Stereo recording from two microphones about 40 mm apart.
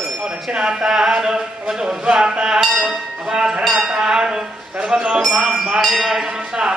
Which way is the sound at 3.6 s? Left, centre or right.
Centre.